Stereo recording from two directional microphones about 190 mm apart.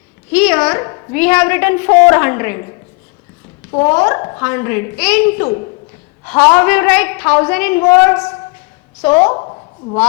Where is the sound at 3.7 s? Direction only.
10° left (ahead or behind).